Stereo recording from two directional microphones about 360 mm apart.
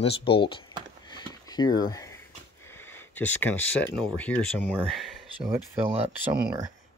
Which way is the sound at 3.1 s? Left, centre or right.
Centre.